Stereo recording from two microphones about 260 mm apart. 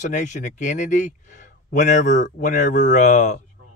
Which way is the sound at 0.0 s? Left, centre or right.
Left.